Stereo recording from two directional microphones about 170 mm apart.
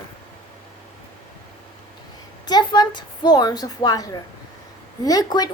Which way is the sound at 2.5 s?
25° left (ahead or behind).